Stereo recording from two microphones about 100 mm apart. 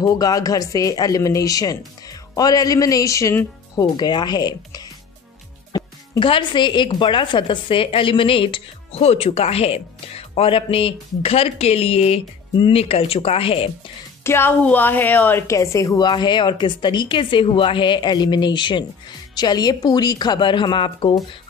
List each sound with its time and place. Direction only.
0.0 s speech: 35° left (ahead or behind)
3.7 s a woman's voice: 45° left (ahead or behind)
5.7 s music: 40° left (ahead or behind)
6.1 s a woman's voice: 60° left (ahead or behind)
14.2 s a woman's voice: 20° left (ahead or behind); by 21.2 s 55° left (ahead or behind)